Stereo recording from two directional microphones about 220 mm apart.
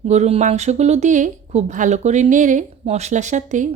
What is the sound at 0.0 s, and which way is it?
Speech, 30° right (ahead or behind).